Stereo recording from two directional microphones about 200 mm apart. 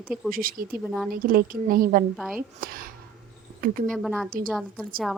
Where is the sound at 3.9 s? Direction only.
Centre (ahead or behind).